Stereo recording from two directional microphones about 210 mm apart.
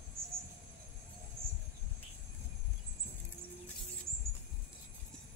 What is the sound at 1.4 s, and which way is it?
Cricket, 25° right (ahead or behind).